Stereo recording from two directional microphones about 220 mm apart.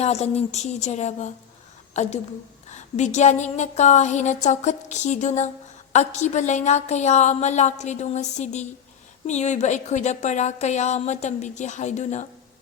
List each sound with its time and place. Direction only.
0.0 s a woman's voice: 30° left (ahead or behind)